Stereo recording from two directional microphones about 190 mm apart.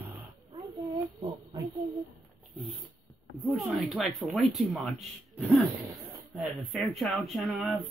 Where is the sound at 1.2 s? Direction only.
20° right (ahead or behind).